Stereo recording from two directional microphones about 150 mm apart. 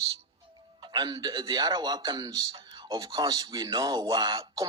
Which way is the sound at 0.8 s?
30° right (ahead or behind).